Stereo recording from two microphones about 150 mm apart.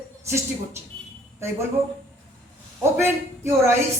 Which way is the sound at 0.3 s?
20° right (ahead or behind).